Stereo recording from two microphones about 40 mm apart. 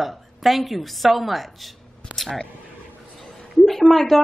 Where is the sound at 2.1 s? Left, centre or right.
Right.